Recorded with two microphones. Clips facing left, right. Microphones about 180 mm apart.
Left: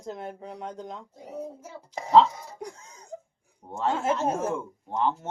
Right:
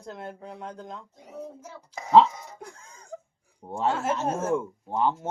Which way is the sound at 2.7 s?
5° left (ahead or behind).